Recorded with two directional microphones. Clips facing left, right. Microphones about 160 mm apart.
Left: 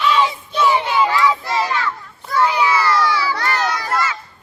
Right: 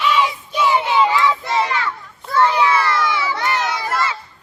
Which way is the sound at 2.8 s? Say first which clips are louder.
Left 2 dB; 20° right (ahead or behind).